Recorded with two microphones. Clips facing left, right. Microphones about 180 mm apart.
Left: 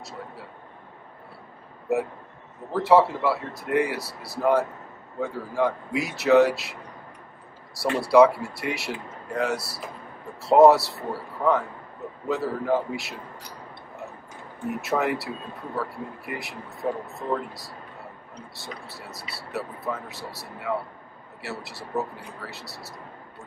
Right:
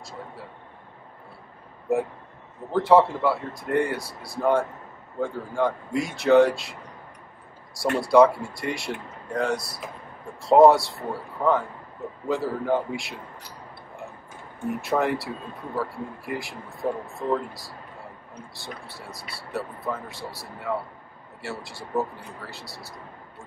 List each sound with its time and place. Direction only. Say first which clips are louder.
2.7 s speech: right 1 dB; centre (ahead or behind)
7.9 s speech: even; 5° left (ahead or behind)
11.4 s a man's voice: even; 10° right (ahead or behind)
14.6 s speech: right 1 dB; centre (ahead or behind)